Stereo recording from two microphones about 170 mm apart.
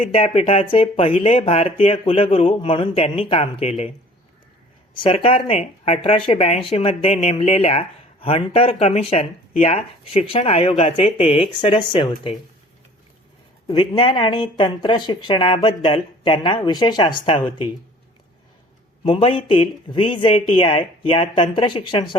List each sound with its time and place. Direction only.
0.0 s speech: 35° left (ahead or behind)
4.9 s speech: 35° left (ahead or behind)
13.7 s speech: 30° left (ahead or behind)
19.0 s speech: 30° left (ahead or behind)